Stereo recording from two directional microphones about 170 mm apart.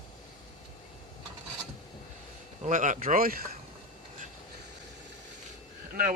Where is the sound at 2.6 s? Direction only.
50° right (ahead or behind).